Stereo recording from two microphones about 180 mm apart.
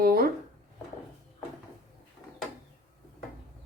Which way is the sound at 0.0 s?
55° right (ahead or behind).